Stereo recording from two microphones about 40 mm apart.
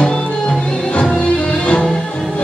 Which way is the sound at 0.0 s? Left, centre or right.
Left.